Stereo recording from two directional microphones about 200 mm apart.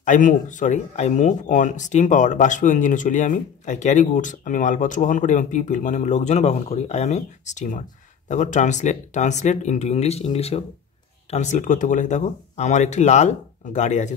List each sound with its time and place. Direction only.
0.0 s speech: 40° left (ahead or behind)